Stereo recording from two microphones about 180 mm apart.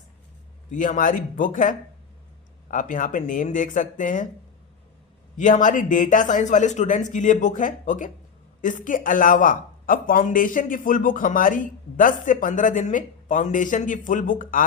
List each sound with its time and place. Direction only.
0.7 s speech: 45° left (ahead or behind)
5.4 s speech: 45° left (ahead or behind)